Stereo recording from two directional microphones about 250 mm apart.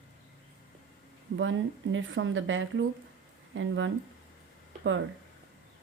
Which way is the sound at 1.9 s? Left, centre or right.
Right.